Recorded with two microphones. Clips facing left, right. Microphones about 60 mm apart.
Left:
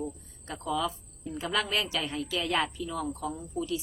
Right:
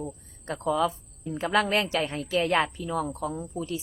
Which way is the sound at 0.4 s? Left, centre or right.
Right.